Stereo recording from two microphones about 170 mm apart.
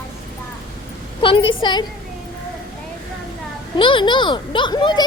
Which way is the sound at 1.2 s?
30° left (ahead or behind).